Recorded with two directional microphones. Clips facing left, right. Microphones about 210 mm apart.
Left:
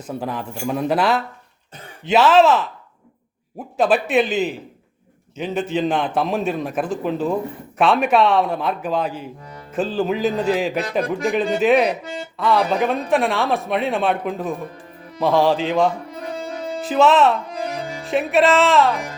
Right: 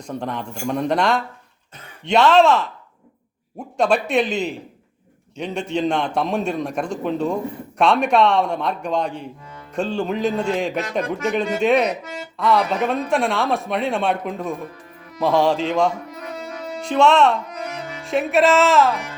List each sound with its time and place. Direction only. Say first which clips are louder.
0.1 s a man's voice: left 1 dB; 5° left (ahead or behind)
3.8 s a man's voice: left 1 dB; 5° left (ahead or behind)
11.9 s speech: left 2 dB; 30° left (ahead or behind)
12.4 s a man's voice: left 1 dB; centre (ahead or behind)
16.0 s music: left 3 dB; 30° left (ahead or behind)
16.8 s a man's voice: left 1 dB; 5° left (ahead or behind)
17.5 s music: left 4 dB; 30° left (ahead or behind)
18.0 s a man's voice: even; centre (ahead or behind)